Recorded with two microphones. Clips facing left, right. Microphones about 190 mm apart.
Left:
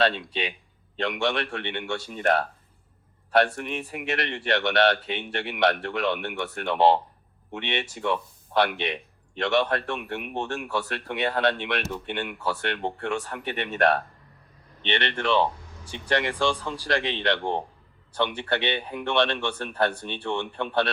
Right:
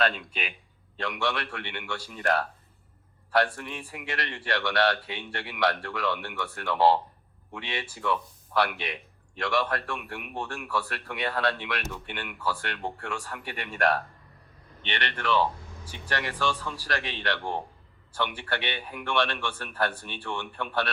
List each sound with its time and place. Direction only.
0.0 s speech: 25° left (ahead or behind)